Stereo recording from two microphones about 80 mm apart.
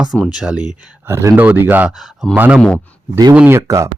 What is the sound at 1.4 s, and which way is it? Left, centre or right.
Speech, right.